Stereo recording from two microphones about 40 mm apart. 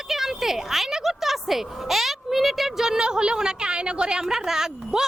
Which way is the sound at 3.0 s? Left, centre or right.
Right.